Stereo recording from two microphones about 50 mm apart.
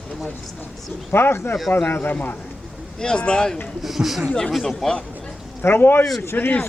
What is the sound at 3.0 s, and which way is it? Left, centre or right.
Speech, centre.